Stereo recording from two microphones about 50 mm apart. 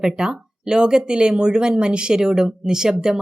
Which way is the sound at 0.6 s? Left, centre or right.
Centre.